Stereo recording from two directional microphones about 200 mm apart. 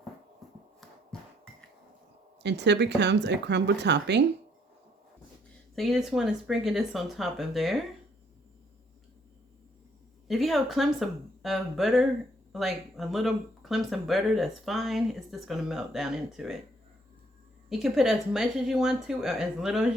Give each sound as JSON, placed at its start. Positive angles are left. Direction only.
{"t": 1.1, "sound": "a sound", "side_deg": 5}
{"t": 2.4, "sound": "speech", "side_deg": -60}
{"t": 5.7, "sound": "speech", "side_deg": 0}
{"t": 10.2, "sound": "speech", "side_deg": 0}
{"t": 17.7, "sound": "speech", "side_deg": 0}